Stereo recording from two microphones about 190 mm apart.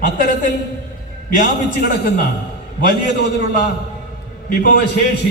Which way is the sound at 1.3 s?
50° left (ahead or behind).